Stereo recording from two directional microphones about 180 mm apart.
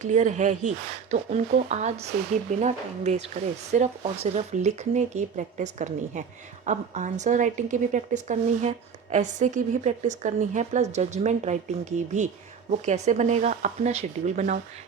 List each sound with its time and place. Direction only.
0.0 s a woman's voice: 40° right (ahead or behind)